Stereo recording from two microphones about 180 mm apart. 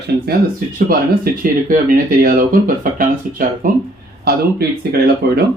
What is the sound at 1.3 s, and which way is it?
Speech, 55° right (ahead or behind).